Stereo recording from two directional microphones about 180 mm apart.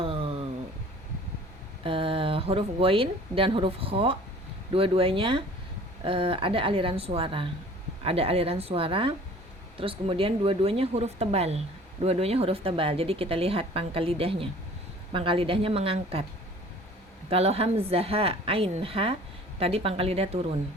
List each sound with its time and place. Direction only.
0.0 s a sound: 30° right (ahead or behind)
1.8 s a woman's voice: 30° right (ahead or behind)
17.2 s speech: 35° right (ahead or behind)